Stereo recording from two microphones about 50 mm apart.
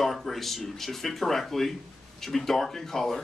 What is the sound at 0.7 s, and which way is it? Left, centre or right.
Speech, centre.